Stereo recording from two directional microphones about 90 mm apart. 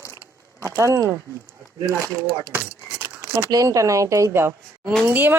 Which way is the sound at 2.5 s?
30° right (ahead or behind).